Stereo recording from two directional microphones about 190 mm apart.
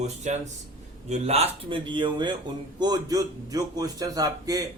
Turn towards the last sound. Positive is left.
turn(degrees=-20)  # may be behind; listen again after turning